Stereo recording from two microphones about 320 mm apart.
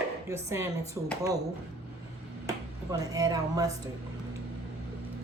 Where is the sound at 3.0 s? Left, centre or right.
Centre.